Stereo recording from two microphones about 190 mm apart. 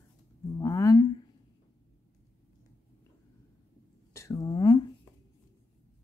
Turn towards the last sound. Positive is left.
turn(degrees=20)  # may be behind; listen again after turning